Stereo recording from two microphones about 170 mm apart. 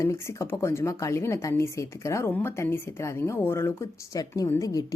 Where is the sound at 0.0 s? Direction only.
15° left (ahead or behind).